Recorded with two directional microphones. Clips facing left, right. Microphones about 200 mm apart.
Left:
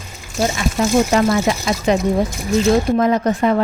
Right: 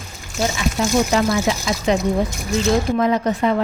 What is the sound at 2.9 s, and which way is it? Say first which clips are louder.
Speech: left 2 dB; 45° left (ahead or behind).